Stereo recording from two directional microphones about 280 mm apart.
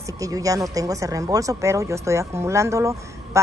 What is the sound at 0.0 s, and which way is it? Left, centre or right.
Speech, centre.